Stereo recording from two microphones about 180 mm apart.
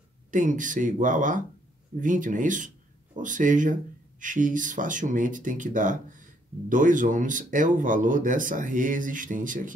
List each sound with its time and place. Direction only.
0.3 s speech: 45° right (ahead or behind)